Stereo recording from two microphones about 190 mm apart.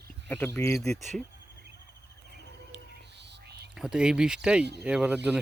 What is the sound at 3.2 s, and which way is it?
Whispering, 60° right (ahead or behind).